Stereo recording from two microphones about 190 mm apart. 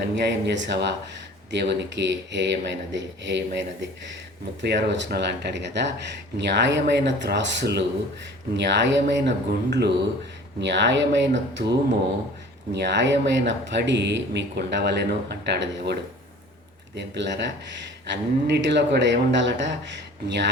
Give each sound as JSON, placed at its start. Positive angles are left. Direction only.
{"t": 0.3, "sound": "speech", "side_deg": -70}
{"t": 4.6, "sound": "speech", "side_deg": -65}